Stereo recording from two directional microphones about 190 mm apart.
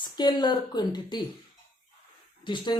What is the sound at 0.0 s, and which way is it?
Speech, 20° left (ahead or behind).